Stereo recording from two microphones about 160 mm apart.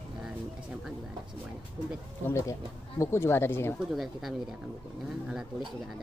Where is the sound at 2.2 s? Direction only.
15° left (ahead or behind).